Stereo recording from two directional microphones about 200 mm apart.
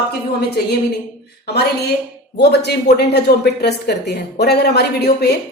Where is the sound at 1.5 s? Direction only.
55° left (ahead or behind).